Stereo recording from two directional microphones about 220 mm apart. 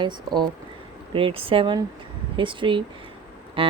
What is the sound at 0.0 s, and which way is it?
Speech, 20° right (ahead or behind).